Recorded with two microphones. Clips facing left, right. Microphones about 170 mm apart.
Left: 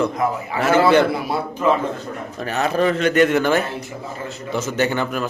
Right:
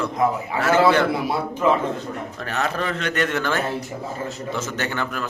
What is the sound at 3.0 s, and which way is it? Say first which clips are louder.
A man's voice: left 7 dB; 10° left (ahead or behind).